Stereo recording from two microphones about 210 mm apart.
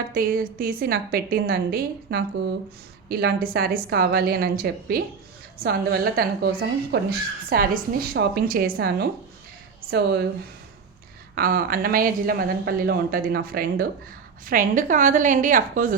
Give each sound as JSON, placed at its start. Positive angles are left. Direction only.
{"t": 0.1, "sound": "speech", "side_deg": -45}
{"t": 11.3, "sound": "a woman's voice", "side_deg": -45}